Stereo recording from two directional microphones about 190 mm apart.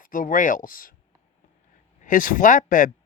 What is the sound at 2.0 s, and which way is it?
Speech, 45° left (ahead or behind).